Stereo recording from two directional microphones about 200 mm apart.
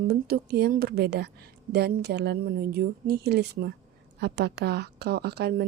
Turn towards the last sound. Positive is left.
turn(degrees=-55)  # may be behind; listen again after turning